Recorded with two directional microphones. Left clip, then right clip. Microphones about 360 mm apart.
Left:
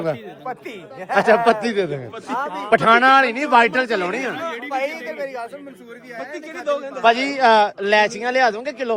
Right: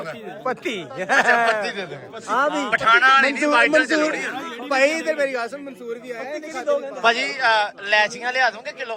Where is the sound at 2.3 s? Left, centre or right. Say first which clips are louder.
Right 5 dB; right.